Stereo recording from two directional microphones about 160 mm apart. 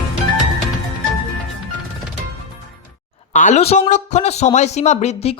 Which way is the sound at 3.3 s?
50° left (ahead or behind).